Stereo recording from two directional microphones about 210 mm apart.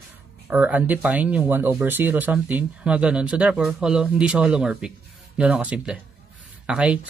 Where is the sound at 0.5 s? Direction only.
10° right (ahead or behind).